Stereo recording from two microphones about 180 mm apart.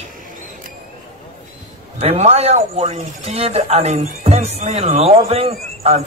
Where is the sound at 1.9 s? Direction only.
35° right (ahead or behind).